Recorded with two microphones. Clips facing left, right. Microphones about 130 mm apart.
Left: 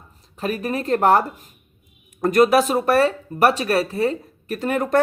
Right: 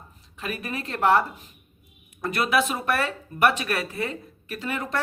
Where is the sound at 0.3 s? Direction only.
40° left (ahead or behind).